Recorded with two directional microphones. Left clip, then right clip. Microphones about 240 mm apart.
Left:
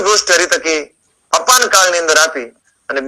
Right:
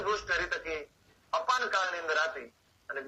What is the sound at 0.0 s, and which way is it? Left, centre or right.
A man's voice, left.